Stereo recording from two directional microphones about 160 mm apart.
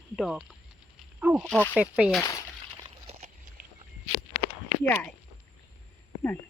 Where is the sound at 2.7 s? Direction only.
35° right (ahead or behind).